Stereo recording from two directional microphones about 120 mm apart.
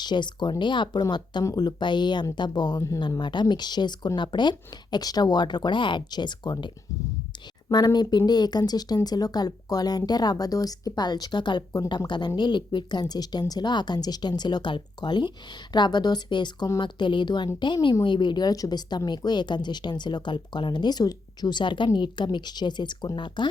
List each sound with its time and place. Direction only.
0.0 s a woman's voice: 40° left (ahead or behind)
7.7 s a woman's voice: 35° left (ahead or behind)